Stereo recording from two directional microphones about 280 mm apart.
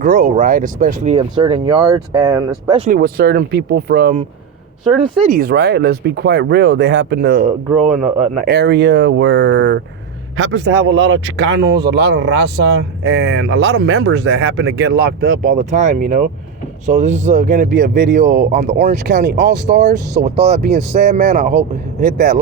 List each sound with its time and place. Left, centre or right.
0.0 s speech: right
2.9 s speech: right
4.8 s speech: centre
5.2 s speech: right
19.0 s speech: right